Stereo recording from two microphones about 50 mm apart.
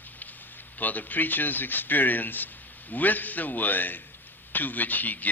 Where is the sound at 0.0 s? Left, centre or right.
Left.